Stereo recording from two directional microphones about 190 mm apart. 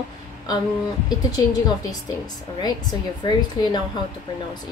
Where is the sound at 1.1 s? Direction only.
20° left (ahead or behind).